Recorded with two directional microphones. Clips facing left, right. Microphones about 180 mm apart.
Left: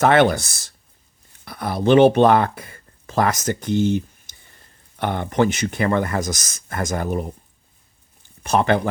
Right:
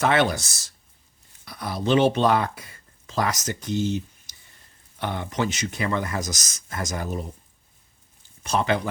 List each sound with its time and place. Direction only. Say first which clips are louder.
0.0 s speech: left 6 dB; 55° left (ahead or behind)
8.4 s speech: left 5 dB; 55° left (ahead or behind)